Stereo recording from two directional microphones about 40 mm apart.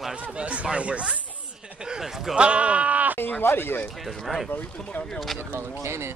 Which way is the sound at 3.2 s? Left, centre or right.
Left.